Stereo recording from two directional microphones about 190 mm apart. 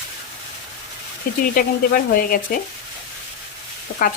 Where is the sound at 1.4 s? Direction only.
50° left (ahead or behind).